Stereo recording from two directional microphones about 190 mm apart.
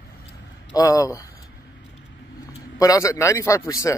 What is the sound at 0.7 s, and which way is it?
Speech, 20° left (ahead or behind).